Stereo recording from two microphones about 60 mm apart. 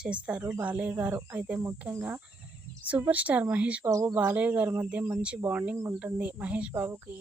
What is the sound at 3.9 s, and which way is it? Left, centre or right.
Speech, right.